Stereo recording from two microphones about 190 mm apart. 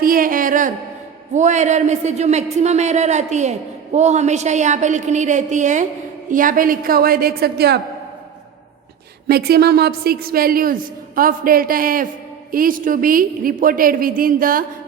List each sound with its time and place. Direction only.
0.0 s a sound: 50° right (ahead or behind)
1.3 s a man's voice: 40° right (ahead or behind); by 7.8 s 55° right (ahead or behind)
9.2 s a woman's voice: 55° right (ahead or behind)